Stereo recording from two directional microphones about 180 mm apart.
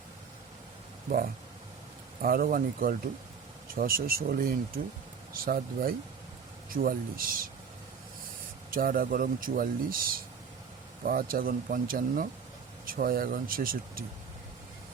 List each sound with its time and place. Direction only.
2.2 s speech: 55° right (ahead or behind)
8.7 s speech: 50° right (ahead or behind)